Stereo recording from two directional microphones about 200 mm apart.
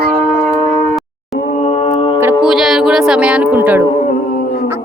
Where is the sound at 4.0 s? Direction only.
45° left (ahead or behind).